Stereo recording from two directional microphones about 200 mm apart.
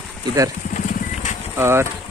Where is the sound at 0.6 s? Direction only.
40° left (ahead or behind).